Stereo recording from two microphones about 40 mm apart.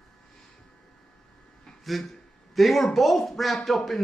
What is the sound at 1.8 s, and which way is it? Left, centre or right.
A man's voice, centre.